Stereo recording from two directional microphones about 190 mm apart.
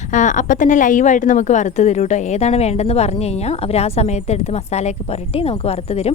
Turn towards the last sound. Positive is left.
turn(degrees=35)  # may be behind; listen again after turning